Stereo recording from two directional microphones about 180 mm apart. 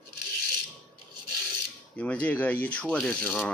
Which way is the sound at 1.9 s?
5° left (ahead or behind).